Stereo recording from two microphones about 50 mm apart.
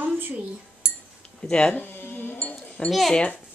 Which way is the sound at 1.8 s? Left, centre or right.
Left.